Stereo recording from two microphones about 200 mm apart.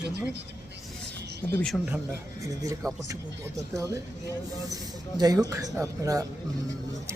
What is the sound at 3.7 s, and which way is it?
Speech, 15° right (ahead or behind).